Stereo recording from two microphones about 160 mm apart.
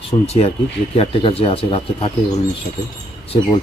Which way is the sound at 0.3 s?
40° left (ahead or behind).